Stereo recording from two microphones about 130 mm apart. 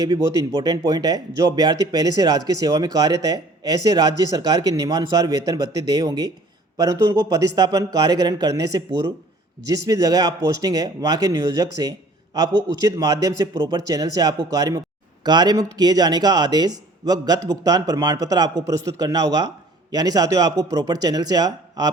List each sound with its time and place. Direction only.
0.0 s speech: 30° right (ahead or behind)